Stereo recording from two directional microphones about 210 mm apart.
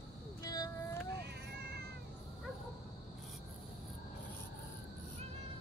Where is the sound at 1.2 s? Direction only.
50° right (ahead or behind).